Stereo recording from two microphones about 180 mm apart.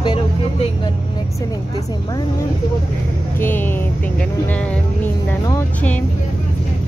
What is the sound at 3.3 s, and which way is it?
Speech, 10° left (ahead or behind).